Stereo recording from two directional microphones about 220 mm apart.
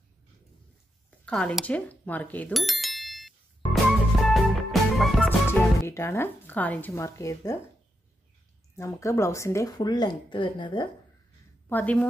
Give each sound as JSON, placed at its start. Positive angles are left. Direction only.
{"t": 1.2, "sound": "bicycle bell", "side_deg": 5}
{"t": 5.5, "sound": "speech", "side_deg": 10}
{"t": 8.7, "sound": "speech", "side_deg": 15}
{"t": 11.7, "sound": "speech", "side_deg": 5}